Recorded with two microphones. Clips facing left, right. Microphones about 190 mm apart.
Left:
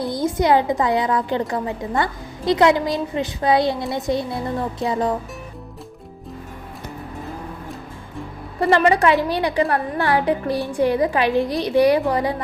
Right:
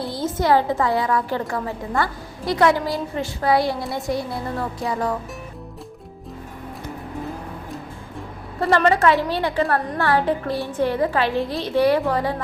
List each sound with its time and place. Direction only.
0.0 s a woman's voice: 15° left (ahead or behind)
8.6 s a woman's voice: 15° left (ahead or behind)